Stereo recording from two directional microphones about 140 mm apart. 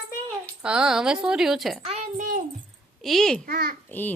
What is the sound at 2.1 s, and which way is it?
Speech, 70° right (ahead or behind).